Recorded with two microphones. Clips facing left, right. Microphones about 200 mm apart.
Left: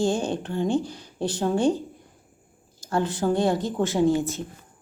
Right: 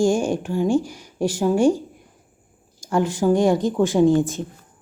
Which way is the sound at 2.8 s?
15° right (ahead or behind).